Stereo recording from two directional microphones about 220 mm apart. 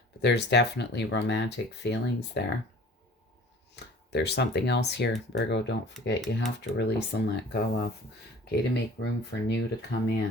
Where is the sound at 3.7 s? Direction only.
50° left (ahead or behind).